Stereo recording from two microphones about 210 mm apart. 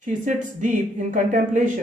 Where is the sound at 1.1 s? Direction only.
35° right (ahead or behind).